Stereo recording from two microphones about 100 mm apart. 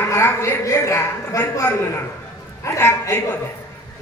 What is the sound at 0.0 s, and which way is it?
A woman's voice, 25° left (ahead or behind).